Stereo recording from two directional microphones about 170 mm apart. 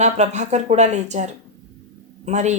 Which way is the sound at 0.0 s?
45° right (ahead or behind).